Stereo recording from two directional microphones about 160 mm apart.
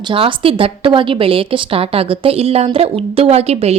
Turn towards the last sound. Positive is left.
turn(degrees=-40)  # may be behind; listen again after turning